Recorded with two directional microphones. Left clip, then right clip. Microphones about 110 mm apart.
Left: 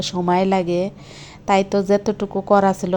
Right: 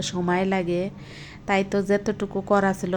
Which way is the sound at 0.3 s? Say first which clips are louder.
Left 6 dB; 25° left (ahead or behind).